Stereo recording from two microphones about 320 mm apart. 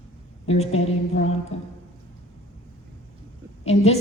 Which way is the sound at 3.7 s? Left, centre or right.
Centre.